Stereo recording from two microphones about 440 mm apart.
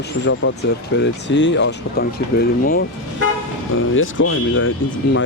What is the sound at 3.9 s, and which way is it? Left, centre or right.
Speech, left.